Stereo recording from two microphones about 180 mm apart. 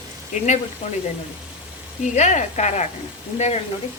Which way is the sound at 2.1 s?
40° left (ahead or behind).